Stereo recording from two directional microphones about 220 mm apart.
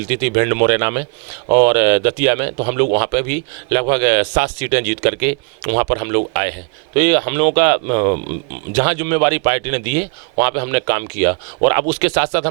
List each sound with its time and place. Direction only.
0.1 s speech: 15° right (ahead or behind)